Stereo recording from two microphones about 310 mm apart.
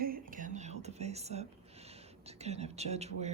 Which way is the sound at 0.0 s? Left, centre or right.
Right.